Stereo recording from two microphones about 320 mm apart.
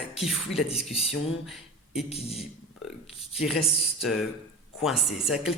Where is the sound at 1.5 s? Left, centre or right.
Centre.